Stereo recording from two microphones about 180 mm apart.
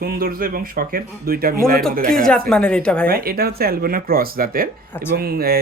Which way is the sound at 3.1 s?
55° right (ahead or behind).